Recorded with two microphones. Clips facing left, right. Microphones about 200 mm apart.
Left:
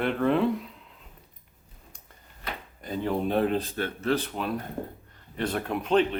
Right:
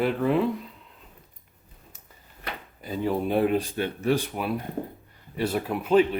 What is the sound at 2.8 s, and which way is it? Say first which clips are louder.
Speech: right 1 dB; 5° right (ahead or behind).